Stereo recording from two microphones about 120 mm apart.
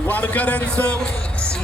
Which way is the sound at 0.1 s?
15° left (ahead or behind).